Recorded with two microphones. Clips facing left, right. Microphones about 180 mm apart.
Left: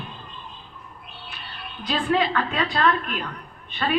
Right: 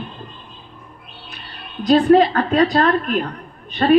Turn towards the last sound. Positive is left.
turn(degrees=-45)  # may be behind; listen again after turning